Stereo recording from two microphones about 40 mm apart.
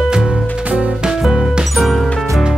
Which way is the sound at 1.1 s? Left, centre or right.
Centre.